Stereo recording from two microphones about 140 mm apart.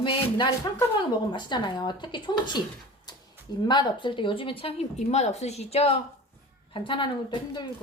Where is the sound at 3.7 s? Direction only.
35° left (ahead or behind).